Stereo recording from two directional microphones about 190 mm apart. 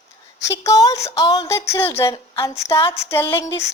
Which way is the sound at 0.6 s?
20° left (ahead or behind).